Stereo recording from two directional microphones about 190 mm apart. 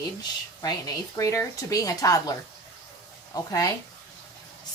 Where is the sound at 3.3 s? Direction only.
15° left (ahead or behind).